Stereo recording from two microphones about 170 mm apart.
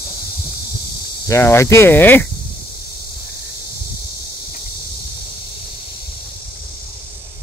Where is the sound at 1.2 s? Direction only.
15° left (ahead or behind).